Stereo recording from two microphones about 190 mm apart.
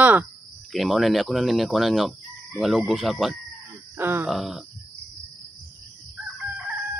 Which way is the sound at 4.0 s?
10° right (ahead or behind).